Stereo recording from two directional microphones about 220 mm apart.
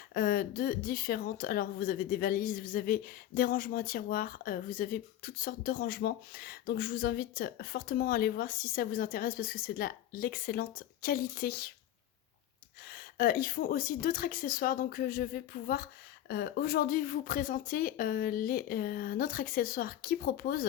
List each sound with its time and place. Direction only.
0.1 s speech: 45° left (ahead or behind)
12.9 s speech: 45° left (ahead or behind)